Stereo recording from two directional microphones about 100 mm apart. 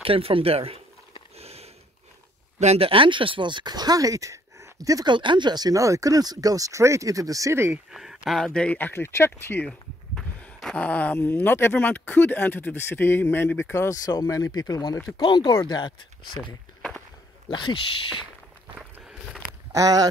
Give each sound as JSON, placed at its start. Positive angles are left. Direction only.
{"t": 0.0, "sound": "speech", "side_deg": -65}
{"t": 1.3, "sound": "sniff", "side_deg": -90}
{"t": 2.6, "sound": "speech", "side_deg": -80}
{"t": 5.1, "sound": "speech", "side_deg": -50}
{"t": 7.7, "sound": "speech", "side_deg": -5}
{"t": 8.4, "sound": "speech", "side_deg": 5}
{"t": 9.7, "sound": "speech", "side_deg": 10}
{"t": 17.5, "sound": "speech", "side_deg": 50}
{"t": 19.7, "sound": "speech", "side_deg": -35}